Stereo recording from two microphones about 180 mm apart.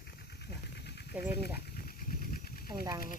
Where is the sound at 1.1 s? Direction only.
10° right (ahead or behind).